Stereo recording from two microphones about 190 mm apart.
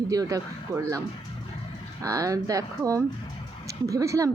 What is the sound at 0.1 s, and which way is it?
Speech, 20° right (ahead or behind).